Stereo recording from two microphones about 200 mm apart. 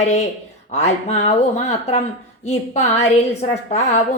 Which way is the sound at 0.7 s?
35° left (ahead or behind).